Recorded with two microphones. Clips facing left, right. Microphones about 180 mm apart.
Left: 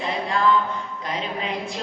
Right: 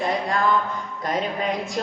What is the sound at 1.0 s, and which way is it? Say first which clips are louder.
Speech: right 5 dB; 45° right (ahead or behind).